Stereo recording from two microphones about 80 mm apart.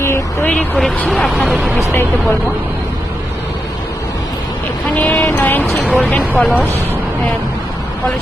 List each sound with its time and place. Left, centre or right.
0.4 s speech: centre
0.8 s speech: centre
5.0 s speech: centre
5.3 s speech: left